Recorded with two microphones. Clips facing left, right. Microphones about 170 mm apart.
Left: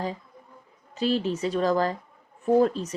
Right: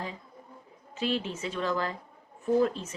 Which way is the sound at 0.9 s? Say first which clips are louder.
Left 6 dB; 35° left (ahead or behind).